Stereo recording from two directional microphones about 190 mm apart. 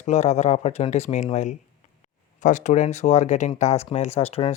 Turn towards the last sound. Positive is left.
turn(degrees=30)  # may be behind; listen again after turning